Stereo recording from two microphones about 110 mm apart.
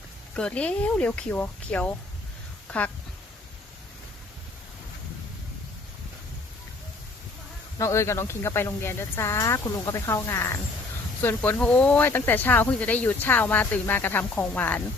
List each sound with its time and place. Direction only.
0.3 s a woman's voice: 10° left (ahead or behind)
7.8 s speech: 25° left (ahead or behind)